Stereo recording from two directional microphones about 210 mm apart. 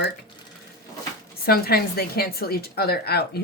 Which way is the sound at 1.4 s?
45° left (ahead or behind).